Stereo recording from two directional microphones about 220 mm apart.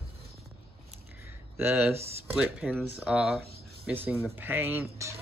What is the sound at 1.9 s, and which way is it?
Speech, 30° right (ahead or behind).